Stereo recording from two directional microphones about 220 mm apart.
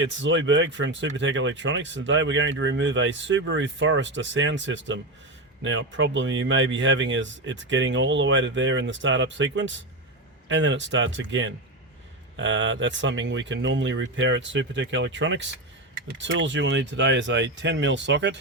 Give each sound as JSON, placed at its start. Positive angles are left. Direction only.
{"t": 0.0, "sound": "speech", "side_deg": -60}